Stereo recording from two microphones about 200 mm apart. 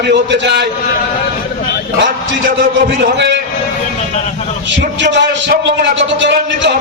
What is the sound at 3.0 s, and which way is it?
Speech, 60° right (ahead or behind).